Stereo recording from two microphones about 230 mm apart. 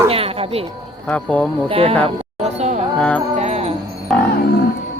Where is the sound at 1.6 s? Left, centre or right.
Right.